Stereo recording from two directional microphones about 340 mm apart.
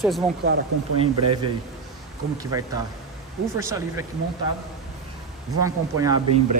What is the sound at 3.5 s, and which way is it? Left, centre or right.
Speech, centre.